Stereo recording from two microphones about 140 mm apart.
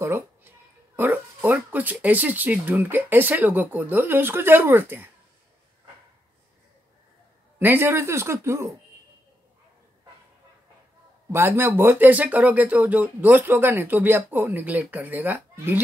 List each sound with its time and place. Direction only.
0.0 s a sound: 15° right (ahead or behind)
0.9 s speech: 15° right (ahead or behind)
7.5 s speech: 15° right (ahead or behind)
11.3 s speech: 15° right (ahead or behind)